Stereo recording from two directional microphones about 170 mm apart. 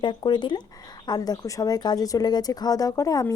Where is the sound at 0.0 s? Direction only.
25° left (ahead or behind).